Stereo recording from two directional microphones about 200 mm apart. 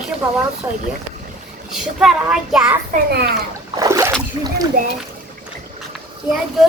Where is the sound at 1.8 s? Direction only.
Centre (ahead or behind).